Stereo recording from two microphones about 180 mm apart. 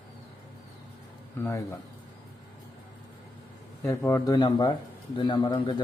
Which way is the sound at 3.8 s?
15° left (ahead or behind).